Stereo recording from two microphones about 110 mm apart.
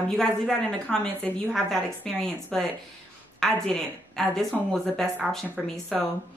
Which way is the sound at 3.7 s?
5° left (ahead or behind).